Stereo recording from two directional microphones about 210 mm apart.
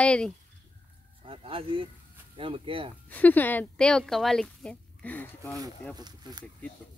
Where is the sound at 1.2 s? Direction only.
25° right (ahead or behind).